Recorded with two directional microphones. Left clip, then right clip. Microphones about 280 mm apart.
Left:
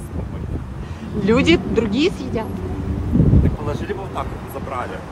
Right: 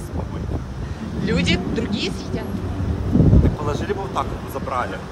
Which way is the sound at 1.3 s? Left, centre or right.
Centre.